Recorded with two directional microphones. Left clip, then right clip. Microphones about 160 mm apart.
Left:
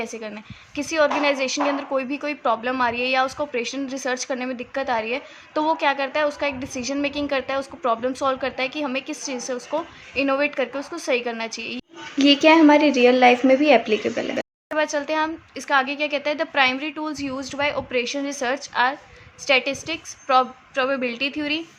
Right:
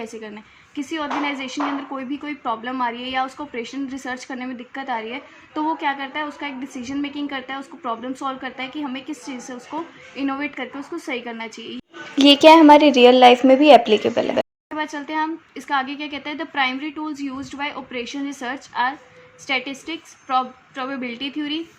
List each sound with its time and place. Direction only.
0.0 s speech: 15° left (ahead or behind)
12.1 s speech: 30° right (ahead or behind)
14.8 s speech: 25° left (ahead or behind)